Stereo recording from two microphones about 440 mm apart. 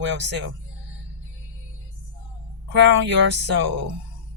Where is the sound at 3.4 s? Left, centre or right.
Right.